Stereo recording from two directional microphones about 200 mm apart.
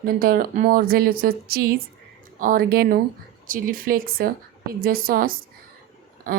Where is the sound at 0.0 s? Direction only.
45° right (ahead or behind).